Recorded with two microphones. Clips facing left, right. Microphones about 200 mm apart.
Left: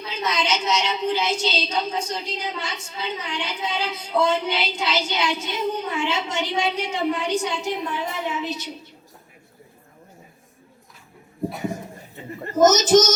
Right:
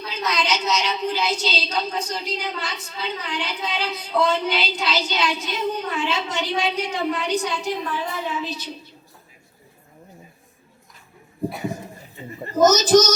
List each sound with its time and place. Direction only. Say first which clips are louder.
0.1 s a woman's voice: even; 25° left (ahead or behind)
12.5 s a woman's voice: even; 20° left (ahead or behind)